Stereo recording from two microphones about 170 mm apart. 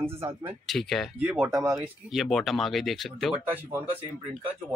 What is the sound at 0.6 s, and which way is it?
Speech, centre (ahead or behind).